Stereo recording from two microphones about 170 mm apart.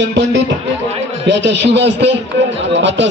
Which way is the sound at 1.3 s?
90° right.